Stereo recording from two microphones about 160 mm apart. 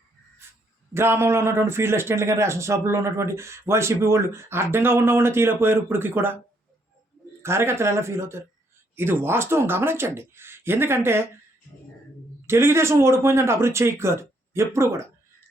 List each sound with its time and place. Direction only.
0.9 s a man's voice: 15° right (ahead or behind)
7.4 s a man's voice: 15° right (ahead or behind)
12.5 s a man's voice: 15° right (ahead or behind)